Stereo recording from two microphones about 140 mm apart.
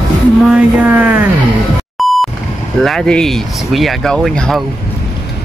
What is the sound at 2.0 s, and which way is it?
Beep, centre (ahead or behind).